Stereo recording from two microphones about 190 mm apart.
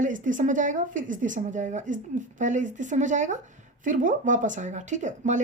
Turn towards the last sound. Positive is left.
turn(degrees=-40)  # may be behind; listen again after turning